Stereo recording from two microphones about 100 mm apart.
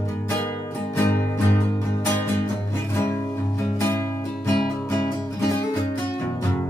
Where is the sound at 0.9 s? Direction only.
25° left (ahead or behind).